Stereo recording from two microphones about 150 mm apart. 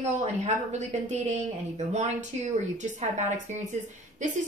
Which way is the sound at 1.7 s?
50° right (ahead or behind).